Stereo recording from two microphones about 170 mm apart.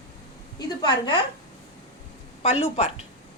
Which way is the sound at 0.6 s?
25° left (ahead or behind).